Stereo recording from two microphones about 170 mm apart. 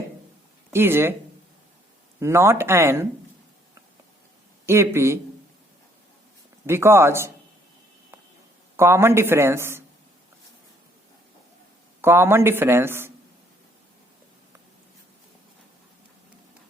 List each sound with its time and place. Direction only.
0.7 s speech: 15° right (ahead or behind)
2.1 s a woman's voice: 15° right (ahead or behind)
4.6 s a woman's voice: 15° right (ahead or behind)
6.7 s a woman's voice: 15° right (ahead or behind)
8.7 s a woman's voice: 15° right (ahead or behind)
12.0 s a woman's voice: 15° right (ahead or behind)